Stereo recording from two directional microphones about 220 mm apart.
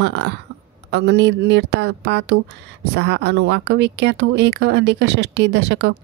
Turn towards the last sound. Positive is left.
turn(degrees=-50)  # may be behind; listen again after turning